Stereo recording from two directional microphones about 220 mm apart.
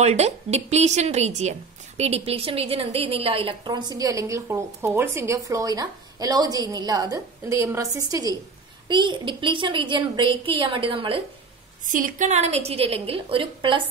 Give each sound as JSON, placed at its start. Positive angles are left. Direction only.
{"t": 0.0, "sound": "a woman's voice", "side_deg": -30}
{"t": 11.9, "sound": "a woman's voice", "side_deg": -35}